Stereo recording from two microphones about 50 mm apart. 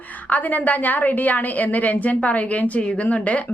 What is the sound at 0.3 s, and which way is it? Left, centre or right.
A woman's voice, left.